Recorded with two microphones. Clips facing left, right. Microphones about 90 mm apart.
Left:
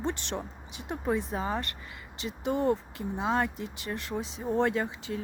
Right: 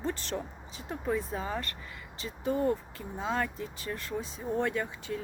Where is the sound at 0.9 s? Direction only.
25° left (ahead or behind).